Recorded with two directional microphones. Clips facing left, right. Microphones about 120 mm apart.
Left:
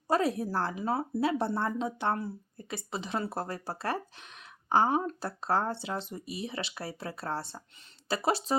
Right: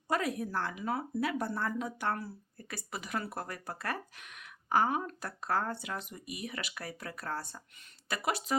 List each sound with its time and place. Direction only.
0.1 s a woman's voice: 30° left (ahead or behind)